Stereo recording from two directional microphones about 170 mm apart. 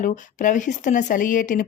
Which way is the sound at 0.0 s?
50° left (ahead or behind).